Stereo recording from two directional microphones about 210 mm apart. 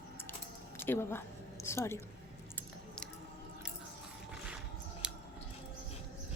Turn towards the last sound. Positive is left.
turn(degrees=-5)  # may be behind; listen again after turning